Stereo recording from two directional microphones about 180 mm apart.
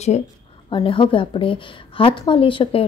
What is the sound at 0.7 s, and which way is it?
A woman's voice, 30° left (ahead or behind).